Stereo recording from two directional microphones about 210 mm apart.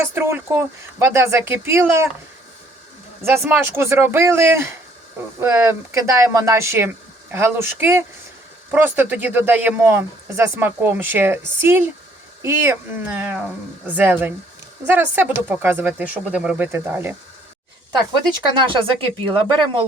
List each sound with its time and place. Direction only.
0.0 s speech: 10° right (ahead or behind)
3.4 s speech: 10° right (ahead or behind)
18.7 s speech: 25° right (ahead or behind)